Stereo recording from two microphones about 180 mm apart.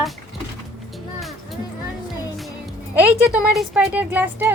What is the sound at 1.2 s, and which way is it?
Music, centre (ahead or behind).